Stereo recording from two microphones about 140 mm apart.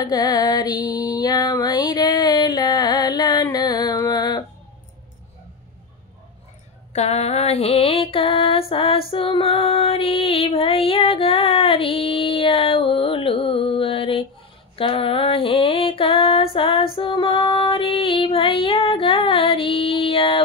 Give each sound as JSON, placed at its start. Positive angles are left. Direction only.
{"t": 0.0, "sound": "female singing", "side_deg": 25}
{"t": 6.9, "sound": "female singing", "side_deg": 50}